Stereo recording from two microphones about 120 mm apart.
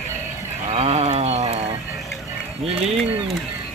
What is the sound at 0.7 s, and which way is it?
Wild animals, 60° right (ahead or behind).